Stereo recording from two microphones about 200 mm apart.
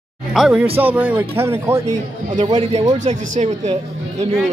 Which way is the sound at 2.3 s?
30° right (ahead or behind).